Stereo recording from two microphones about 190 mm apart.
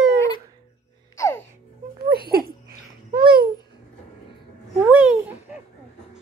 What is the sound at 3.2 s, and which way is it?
Babbling, 55° right (ahead or behind).